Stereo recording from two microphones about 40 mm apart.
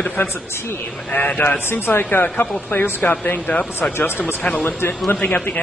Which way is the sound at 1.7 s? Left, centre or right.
Left.